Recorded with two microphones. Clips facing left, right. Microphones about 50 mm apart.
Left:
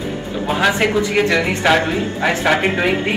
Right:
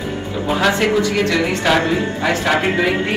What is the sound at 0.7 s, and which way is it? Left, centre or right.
A man's voice, centre.